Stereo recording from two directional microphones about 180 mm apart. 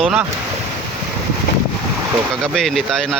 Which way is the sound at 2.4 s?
5° left (ahead or behind).